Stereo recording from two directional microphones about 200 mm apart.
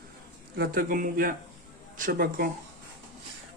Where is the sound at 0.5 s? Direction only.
45° right (ahead or behind).